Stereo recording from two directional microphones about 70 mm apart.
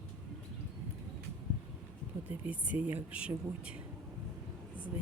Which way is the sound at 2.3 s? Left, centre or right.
Right.